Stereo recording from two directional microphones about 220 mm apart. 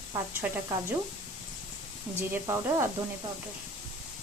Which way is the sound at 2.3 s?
15° right (ahead or behind).